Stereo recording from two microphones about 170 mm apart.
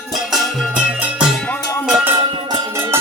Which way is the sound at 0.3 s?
5° right (ahead or behind).